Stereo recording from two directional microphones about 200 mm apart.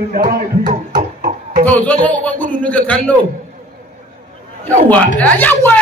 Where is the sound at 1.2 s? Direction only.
45° right (ahead or behind).